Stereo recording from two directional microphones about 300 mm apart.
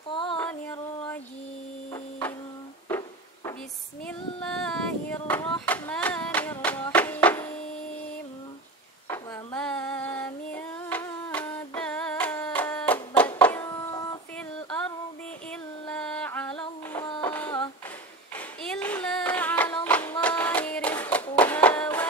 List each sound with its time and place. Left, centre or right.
0.1 s music: centre
0.4 s a sound: centre
2.9 s music: centre
4.0 s a sound: centre
9.0 s female singing: centre
15.9 s music: centre
17.0 s printer: centre
18.3 s clapping: centre